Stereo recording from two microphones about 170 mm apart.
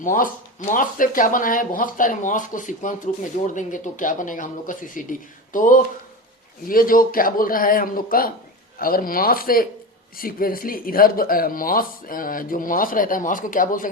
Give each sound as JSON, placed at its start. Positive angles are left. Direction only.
{"t": 0.0, "sound": "speech", "side_deg": 50}